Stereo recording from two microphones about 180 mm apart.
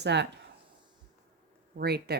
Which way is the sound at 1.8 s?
65° right (ahead or behind).